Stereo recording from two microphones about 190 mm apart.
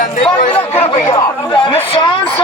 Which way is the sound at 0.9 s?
25° left (ahead or behind).